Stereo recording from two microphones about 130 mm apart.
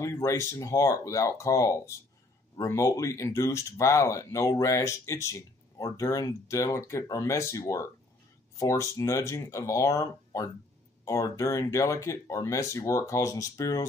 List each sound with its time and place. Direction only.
0.0 s speech: 20° left (ahead or behind)